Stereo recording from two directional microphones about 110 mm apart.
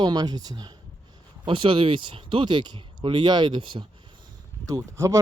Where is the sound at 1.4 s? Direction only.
50° right (ahead or behind).